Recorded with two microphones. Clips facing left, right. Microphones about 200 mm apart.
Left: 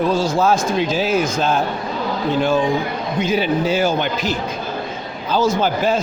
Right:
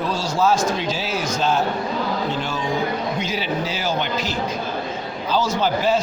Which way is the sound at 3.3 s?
55° left (ahead or behind).